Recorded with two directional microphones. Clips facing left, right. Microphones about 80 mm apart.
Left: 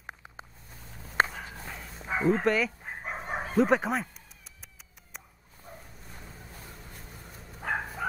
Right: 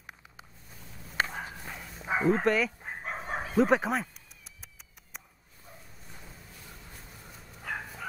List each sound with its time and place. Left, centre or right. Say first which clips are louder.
0.0 s vehicle: left 5 dB; left
1.2 s walk: left 5 dB; left
1.6 s dog: left 1 dB; centre
2.2 s chicken: left 1 dB; centre
3.5 s a sound: even; centre
5.7 s bow-wow: left 5 dB; left
7.6 s bow-wow: left 6 dB; left